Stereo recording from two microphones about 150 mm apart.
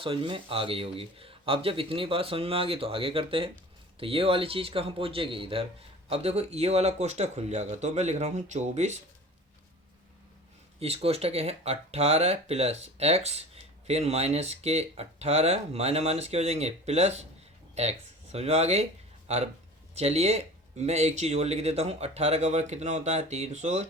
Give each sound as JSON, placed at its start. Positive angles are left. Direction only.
{"t": 0.0, "sound": "speech", "side_deg": -35}
{"t": 10.8, "sound": "speech", "side_deg": -40}